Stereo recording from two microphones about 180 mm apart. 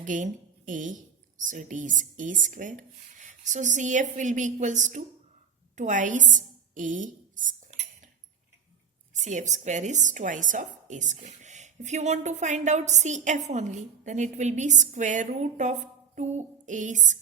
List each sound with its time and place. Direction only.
0.0 s a woman's voice: 45° right (ahead or behind)
5.7 s writing: 45° right (ahead or behind)
9.2 s a woman's voice: 40° right (ahead or behind)